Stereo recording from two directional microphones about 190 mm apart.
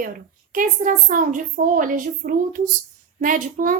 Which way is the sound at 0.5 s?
45° right (ahead or behind).